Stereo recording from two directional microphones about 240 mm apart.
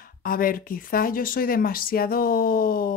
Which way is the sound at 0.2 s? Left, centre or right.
Left.